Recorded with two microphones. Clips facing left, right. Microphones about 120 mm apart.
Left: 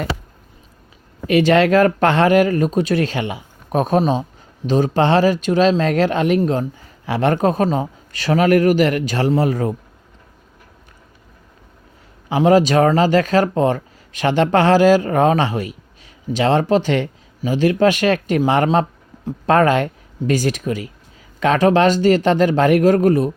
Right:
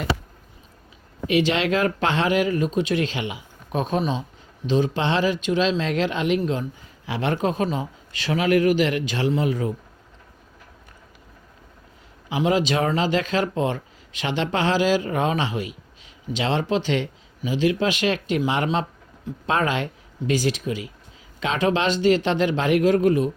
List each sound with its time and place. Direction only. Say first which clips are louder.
1.3 s speech: left 7 dB; 50° left (ahead or behind)
12.3 s speech: left 8 dB; 50° left (ahead or behind)